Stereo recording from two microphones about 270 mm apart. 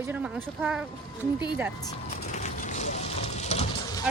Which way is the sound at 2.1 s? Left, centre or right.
Left.